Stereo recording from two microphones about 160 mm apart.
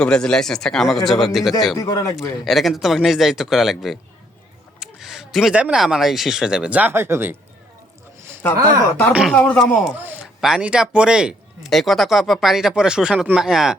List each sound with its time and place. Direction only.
0.0 s speech: 5° left (ahead or behind)
1.7 s speech: 25° left (ahead or behind)
2.4 s speech: centre (ahead or behind)
8.4 s speech: 10° left (ahead or behind)
9.1 s speech: centre (ahead or behind)